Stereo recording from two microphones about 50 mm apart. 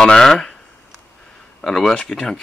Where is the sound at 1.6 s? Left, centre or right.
Centre.